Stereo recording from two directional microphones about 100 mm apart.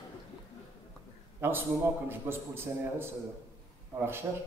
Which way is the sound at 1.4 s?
25° right (ahead or behind).